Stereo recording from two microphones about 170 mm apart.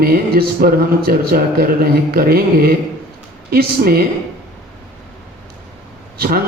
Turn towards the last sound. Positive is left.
turn(degrees=-60)  # may be behind; listen again after turning